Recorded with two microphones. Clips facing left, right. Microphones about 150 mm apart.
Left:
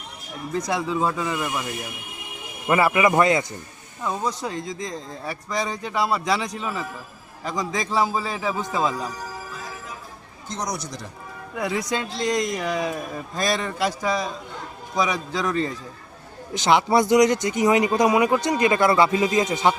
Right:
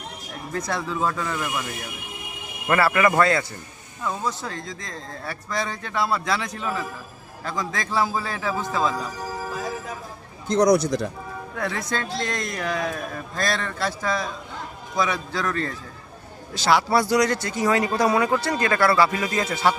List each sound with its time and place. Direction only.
0.6 s speech: 10° left (ahead or behind)
2.6 s speech: 15° left (ahead or behind)
10.7 s speech: 60° right (ahead or behind)
11.5 s speech: 10° left (ahead or behind)